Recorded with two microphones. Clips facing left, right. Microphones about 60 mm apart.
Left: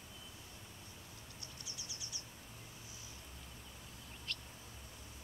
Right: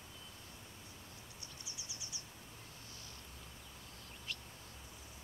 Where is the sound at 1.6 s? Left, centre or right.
Right.